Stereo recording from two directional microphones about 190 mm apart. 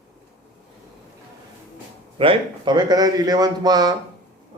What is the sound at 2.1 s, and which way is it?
A man's voice, 25° right (ahead or behind).